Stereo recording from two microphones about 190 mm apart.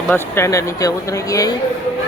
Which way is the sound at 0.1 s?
10° left (ahead or behind).